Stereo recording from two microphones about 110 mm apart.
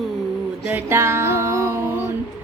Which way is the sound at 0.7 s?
20° right (ahead or behind).